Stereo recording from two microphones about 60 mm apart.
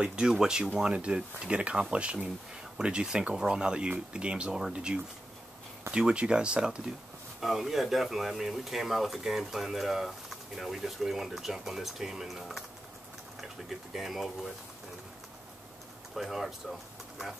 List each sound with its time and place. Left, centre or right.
0.0 s speech: centre
7.3 s speech: centre
16.2 s speech: centre